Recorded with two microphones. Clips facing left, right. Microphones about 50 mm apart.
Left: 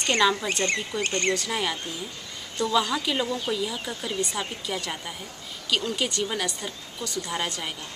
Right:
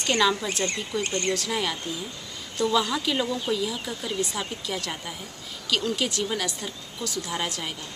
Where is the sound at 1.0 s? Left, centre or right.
Left.